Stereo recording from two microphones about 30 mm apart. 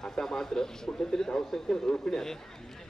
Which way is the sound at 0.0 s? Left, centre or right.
Left.